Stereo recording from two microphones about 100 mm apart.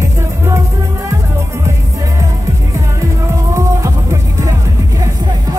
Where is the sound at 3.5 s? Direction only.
30° right (ahead or behind).